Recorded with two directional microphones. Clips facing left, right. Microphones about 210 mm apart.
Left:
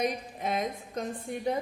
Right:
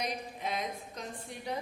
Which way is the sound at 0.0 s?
50° left (ahead or behind).